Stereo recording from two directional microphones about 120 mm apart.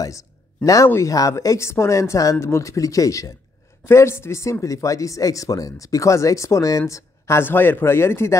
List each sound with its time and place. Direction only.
0.0 s speech: 25° left (ahead or behind)